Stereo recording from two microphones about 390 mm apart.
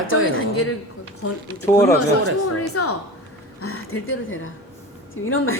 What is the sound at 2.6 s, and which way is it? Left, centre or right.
A woman's voice, left.